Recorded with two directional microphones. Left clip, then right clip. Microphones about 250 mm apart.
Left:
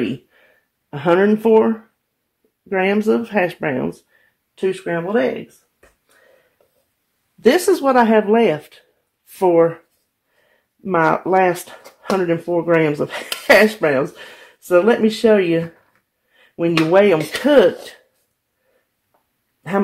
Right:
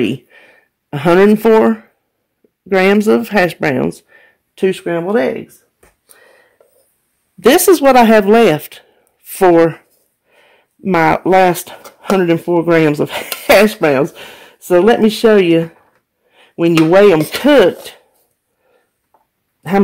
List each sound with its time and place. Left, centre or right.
0.0 s speech: right
4.1 s a sound: right
4.6 s speech: right
7.4 s speech: right
10.8 s speech: right